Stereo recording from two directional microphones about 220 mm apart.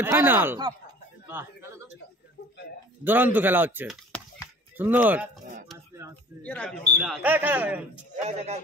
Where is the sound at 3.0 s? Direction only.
10° right (ahead or behind).